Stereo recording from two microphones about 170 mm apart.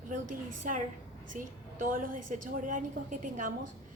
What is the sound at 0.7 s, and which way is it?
A woman's voice, 50° right (ahead or behind).